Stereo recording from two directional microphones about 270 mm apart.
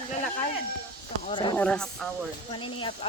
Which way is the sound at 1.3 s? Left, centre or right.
Centre.